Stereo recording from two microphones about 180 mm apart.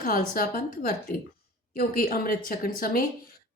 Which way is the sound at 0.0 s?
55° left (ahead or behind).